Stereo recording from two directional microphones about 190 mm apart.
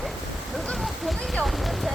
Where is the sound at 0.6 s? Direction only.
Centre (ahead or behind).